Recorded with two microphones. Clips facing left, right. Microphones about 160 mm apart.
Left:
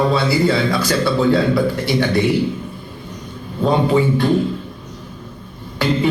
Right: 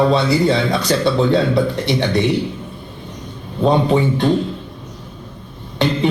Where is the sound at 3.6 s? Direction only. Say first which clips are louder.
Right 1 dB; 20° right (ahead or behind).